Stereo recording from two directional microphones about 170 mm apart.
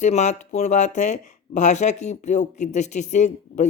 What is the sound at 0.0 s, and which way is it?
Speech, 40° left (ahead or behind).